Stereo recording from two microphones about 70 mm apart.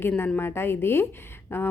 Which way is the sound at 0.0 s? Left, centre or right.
Left.